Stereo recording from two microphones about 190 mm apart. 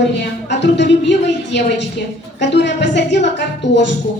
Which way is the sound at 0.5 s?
65° left (ahead or behind).